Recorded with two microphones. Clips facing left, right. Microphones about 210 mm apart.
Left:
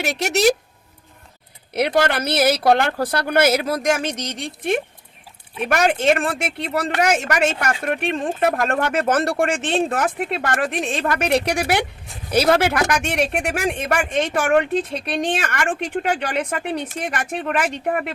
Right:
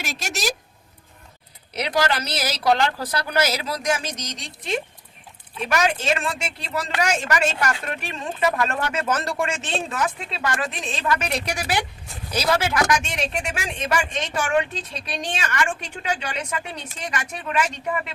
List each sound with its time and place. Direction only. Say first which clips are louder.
0.0 s speech: left 11 dB; 65° left (ahead or behind)
1.7 s speech: left 4 dB; 55° left (ahead or behind)